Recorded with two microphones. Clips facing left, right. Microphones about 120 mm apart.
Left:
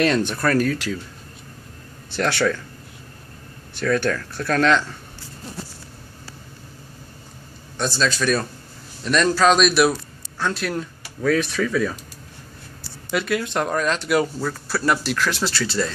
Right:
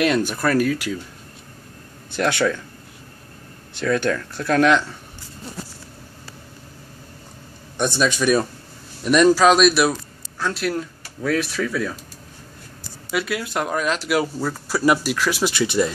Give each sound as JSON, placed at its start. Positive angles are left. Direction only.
{"t": 0.0, "sound": "speech", "side_deg": -10}
{"t": 2.0, "sound": "speech", "side_deg": -15}
{"t": 3.7, "sound": "speech", "side_deg": -15}
{"t": 7.7, "sound": "speech", "side_deg": -20}
{"t": 13.1, "sound": "speech", "side_deg": 0}